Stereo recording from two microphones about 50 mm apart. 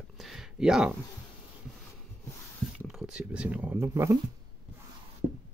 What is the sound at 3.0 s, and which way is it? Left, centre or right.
Speech, right.